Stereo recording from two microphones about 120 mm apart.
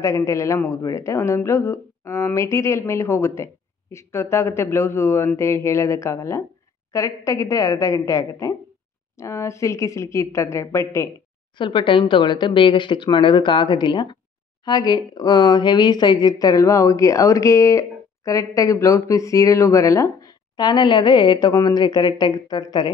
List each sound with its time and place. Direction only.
0.0 s speech: 25° left (ahead or behind)
11.5 s speech: 40° left (ahead or behind)